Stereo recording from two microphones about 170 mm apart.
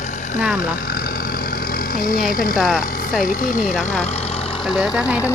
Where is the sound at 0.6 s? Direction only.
60° left (ahead or behind).